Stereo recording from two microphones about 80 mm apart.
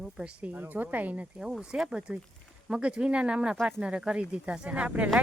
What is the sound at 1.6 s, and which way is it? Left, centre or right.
Speech, centre.